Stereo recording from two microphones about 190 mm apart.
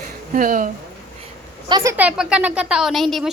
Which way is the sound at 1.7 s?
15° right (ahead or behind).